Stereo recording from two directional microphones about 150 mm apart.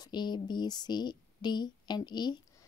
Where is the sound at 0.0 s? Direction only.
30° left (ahead or behind).